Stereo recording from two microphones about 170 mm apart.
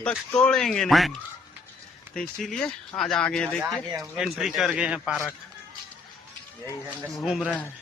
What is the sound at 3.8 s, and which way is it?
Speech, 20° right (ahead or behind).